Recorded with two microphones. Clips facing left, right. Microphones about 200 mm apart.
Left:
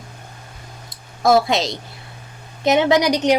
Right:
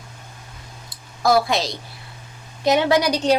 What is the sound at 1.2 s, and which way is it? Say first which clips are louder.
A woman's voice: left 3 dB; 25° left (ahead or behind).